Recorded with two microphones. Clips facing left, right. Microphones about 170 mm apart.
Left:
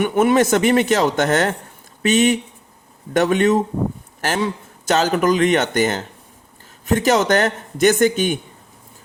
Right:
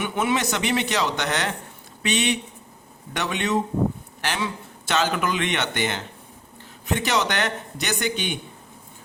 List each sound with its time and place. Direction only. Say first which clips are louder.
0.0 s a man's voice: left 9 dB; 50° left (ahead or behind)